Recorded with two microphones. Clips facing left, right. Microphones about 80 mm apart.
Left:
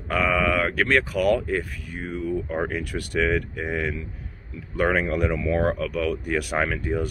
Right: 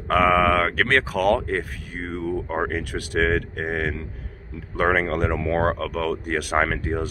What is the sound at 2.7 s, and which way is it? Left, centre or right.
Speech, right.